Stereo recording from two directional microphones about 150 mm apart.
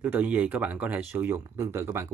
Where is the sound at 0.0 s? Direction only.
10° right (ahead or behind).